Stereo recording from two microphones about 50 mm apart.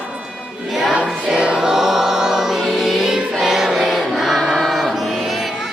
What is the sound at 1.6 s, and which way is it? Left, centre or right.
Choir, centre.